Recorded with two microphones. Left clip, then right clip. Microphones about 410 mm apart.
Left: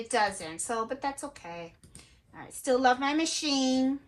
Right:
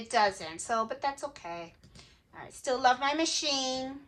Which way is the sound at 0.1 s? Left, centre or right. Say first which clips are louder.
Right 1 dB; centre.